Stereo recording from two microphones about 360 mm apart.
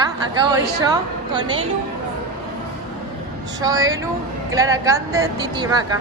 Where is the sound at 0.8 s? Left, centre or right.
Centre.